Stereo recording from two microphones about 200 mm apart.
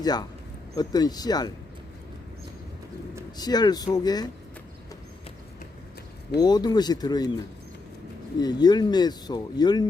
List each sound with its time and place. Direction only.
0.0 s speech: 20° left (ahead or behind)
3.3 s speech: 20° left (ahead or behind)
6.3 s speech: 20° left (ahead or behind)
8.4 s speech: 20° left (ahead or behind)